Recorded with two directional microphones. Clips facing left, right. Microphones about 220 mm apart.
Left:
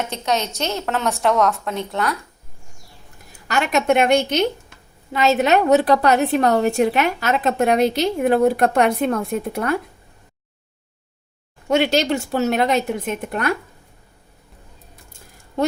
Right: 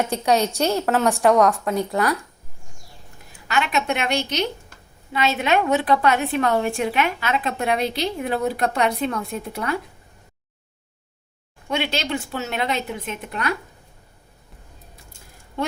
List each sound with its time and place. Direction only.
0.0 s a woman's voice: 10° right (ahead or behind)
3.5 s a woman's voice: 45° left (ahead or behind)
11.7 s a woman's voice: 45° left (ahead or behind)